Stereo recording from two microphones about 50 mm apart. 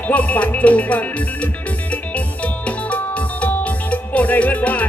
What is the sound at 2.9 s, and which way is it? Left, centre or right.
Music, left.